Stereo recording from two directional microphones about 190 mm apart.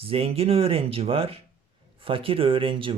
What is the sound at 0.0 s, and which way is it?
Speech, 30° right (ahead or behind).